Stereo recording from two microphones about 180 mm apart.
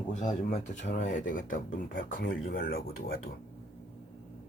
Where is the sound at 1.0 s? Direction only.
50° left (ahead or behind).